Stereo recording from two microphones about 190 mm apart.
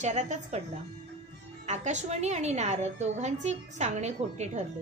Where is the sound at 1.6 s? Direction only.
40° right (ahead or behind).